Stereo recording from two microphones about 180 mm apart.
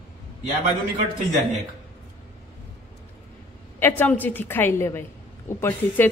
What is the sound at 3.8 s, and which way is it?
A woman's voice, 10° left (ahead or behind).